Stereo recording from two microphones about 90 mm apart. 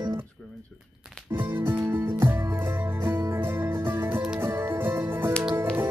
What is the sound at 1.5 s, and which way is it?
Music, 25° right (ahead or behind).